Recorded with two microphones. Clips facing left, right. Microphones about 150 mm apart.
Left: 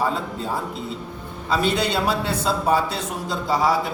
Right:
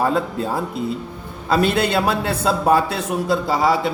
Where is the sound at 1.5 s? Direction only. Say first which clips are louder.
Right 4 dB; 55° right (ahead or behind).